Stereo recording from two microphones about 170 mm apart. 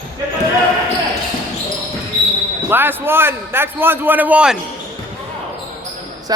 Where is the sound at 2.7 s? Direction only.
10° right (ahead or behind).